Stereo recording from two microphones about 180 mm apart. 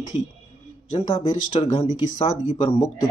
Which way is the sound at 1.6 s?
35° left (ahead or behind).